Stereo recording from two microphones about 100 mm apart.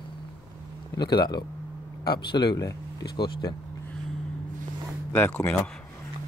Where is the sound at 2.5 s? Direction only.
35° left (ahead or behind).